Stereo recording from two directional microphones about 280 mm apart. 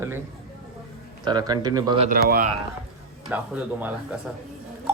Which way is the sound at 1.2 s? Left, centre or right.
Centre.